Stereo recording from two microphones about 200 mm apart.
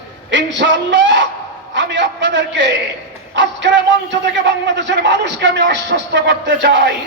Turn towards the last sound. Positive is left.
turn(degrees=-60)  # may be behind; listen again after turning